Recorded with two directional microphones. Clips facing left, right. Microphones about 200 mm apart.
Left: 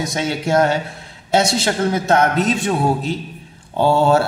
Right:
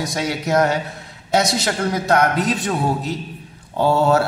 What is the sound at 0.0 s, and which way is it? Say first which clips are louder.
A man's voice: left 2 dB; 25° left (ahead or behind).